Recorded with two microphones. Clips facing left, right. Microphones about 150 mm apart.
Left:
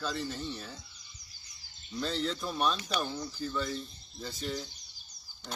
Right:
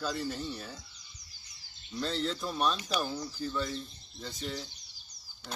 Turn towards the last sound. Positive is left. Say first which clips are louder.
# left 1 dB
turn(degrees=0)  # may be behind; listen again after turning